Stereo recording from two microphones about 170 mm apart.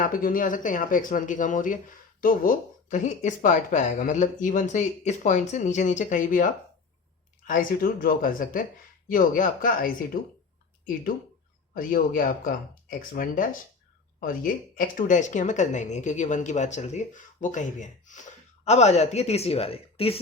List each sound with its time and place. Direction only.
0.0 s speech: 55° left (ahead or behind)
11.7 s speech: 55° left (ahead or behind); by 20.1 s 35° left (ahead or behind)